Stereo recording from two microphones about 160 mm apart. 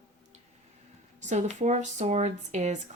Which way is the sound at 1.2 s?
50° right (ahead or behind).